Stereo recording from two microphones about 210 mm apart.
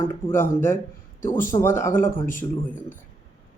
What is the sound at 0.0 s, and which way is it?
Mantra, 10° left (ahead or behind).